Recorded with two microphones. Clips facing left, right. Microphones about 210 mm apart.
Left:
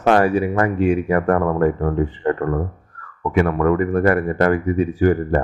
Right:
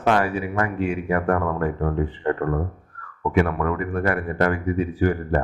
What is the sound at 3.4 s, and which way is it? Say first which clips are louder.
Speech: left 9 dB; 45° left (ahead or behind).